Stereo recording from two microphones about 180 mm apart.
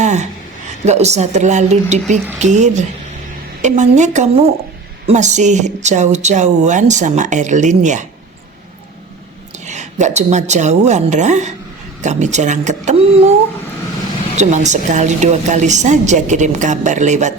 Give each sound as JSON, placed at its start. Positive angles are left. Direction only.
{"t": 0.0, "sound": "a sound", "side_deg": -40}
{"t": 0.9, "sound": "speech", "side_deg": -35}
{"t": 9.6, "sound": "speech", "side_deg": -40}
{"t": 14.3, "sound": "speech", "side_deg": -40}